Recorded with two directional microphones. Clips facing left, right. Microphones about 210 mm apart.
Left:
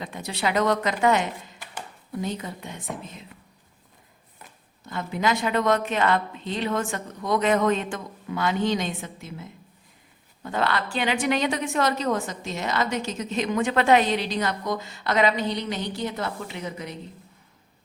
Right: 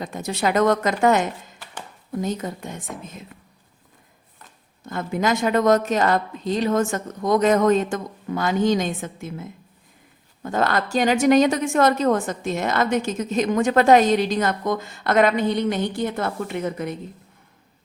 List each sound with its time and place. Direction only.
0.0 s a woman's voice: 45° right (ahead or behind)
4.9 s a woman's voice: 50° right (ahead or behind)